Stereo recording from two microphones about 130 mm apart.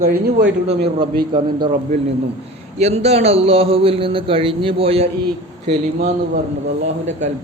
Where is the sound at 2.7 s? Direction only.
55° right (ahead or behind).